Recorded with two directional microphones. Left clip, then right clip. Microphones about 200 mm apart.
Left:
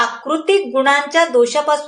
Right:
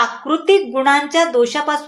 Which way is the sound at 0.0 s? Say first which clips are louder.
Even; 25° right (ahead or behind).